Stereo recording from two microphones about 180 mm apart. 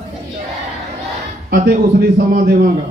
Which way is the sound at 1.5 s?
55° right (ahead or behind).